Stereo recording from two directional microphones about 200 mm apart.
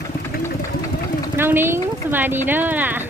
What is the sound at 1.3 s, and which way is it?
Speech, 10° right (ahead or behind).